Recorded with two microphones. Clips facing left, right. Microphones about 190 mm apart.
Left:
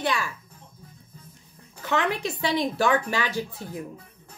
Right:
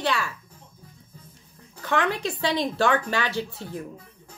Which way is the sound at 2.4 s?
20° right (ahead or behind).